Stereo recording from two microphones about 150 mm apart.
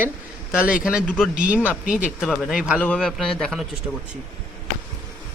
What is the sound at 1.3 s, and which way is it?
Speech, 10° right (ahead or behind).